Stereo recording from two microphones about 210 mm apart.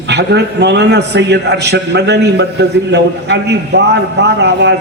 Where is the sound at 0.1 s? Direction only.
55° right (ahead or behind).